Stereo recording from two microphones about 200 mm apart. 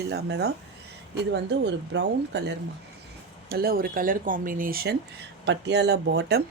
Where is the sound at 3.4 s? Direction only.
50° right (ahead or behind).